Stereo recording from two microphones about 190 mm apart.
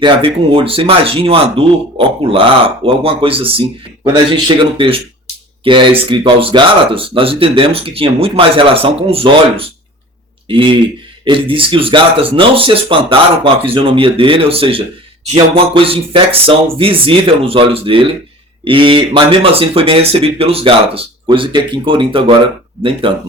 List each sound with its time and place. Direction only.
0.0 s speech: 25° right (ahead or behind)